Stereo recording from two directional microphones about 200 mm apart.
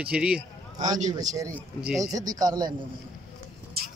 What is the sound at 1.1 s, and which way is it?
A man's voice, 20° right (ahead or behind).